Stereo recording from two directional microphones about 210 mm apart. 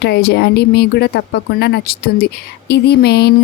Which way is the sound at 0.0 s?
50° left (ahead or behind).